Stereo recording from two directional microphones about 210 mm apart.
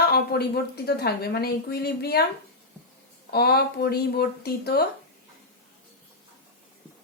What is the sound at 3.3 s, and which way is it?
A woman's voice, 50° left (ahead or behind).